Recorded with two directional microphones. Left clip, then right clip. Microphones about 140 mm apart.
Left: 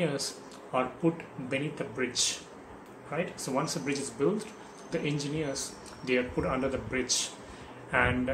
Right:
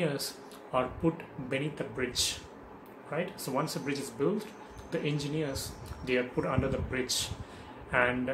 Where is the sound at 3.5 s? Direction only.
Centre (ahead or behind).